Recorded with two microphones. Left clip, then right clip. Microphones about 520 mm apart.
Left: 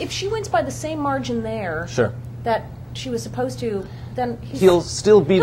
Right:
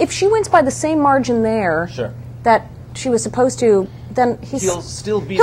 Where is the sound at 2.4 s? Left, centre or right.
Right.